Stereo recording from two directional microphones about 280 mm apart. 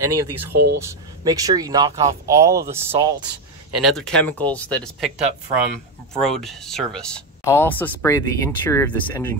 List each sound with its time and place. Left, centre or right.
0.1 s speech: right
0.7 s speech: centre
3.8 s speech: centre
6.1 s speech: centre